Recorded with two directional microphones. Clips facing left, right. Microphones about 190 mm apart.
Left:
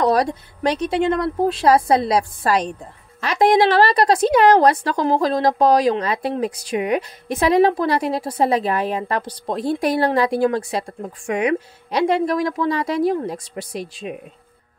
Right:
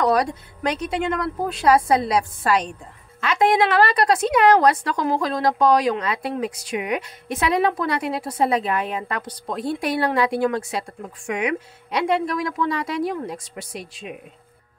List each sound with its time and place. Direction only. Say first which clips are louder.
0.0 s a woman's voice: left 2 dB; 35° left (ahead or behind)